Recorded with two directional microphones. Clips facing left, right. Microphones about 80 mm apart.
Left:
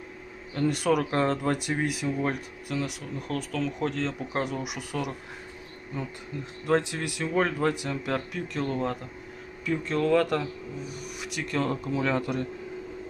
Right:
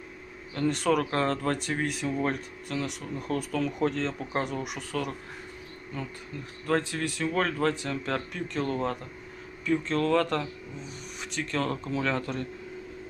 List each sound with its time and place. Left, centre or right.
0.5 s speech: centre
4.9 s speech: centre
6.7 s speech: centre